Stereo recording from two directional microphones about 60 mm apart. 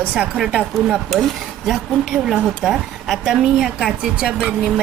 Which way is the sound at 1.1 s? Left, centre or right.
Centre.